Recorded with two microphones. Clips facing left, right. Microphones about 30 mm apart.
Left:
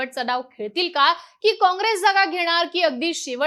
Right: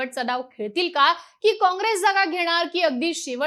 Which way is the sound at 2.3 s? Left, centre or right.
Left.